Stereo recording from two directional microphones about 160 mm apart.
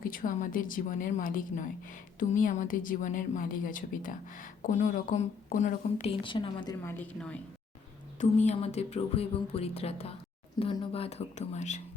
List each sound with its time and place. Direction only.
0.0 s a woman's voice: 60° left (ahead or behind); by 6.7 s 30° left (ahead or behind)
6.8 s a woman's voice: 10° left (ahead or behind)
8.2 s speech: 45° left (ahead or behind)